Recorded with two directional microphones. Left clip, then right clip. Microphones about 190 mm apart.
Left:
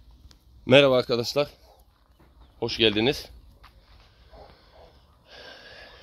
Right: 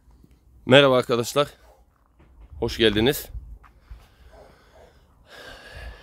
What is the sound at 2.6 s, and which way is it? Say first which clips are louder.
Speech: right 2 dB; 35° right (ahead or behind).